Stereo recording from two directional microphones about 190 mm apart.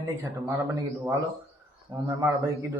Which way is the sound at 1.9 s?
15° right (ahead or behind).